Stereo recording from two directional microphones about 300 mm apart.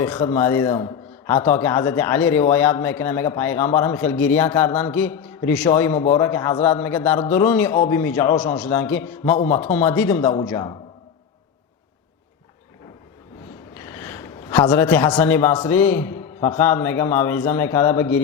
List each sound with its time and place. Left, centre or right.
0.0 s a man's voice: centre
13.8 s a man's voice: centre